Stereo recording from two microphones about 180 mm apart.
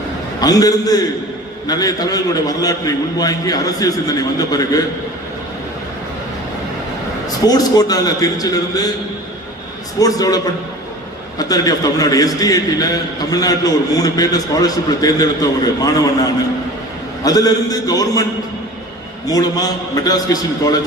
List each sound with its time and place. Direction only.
0.3 s a man's voice: 20° left (ahead or behind)
7.3 s a man's voice: 20° left (ahead or behind)
10.0 s a man's voice: 20° left (ahead or behind)
19.3 s a man's voice: 20° left (ahead or behind)